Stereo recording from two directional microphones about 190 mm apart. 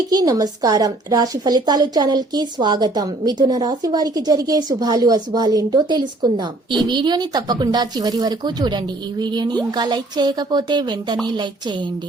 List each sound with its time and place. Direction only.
0.1 s a woman's voice: 20° right (ahead or behind)